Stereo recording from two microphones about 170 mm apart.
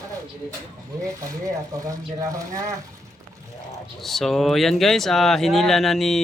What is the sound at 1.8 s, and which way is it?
Speech, 20° right (ahead or behind).